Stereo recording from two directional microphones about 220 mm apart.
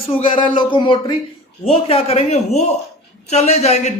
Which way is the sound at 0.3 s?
20° left (ahead or behind).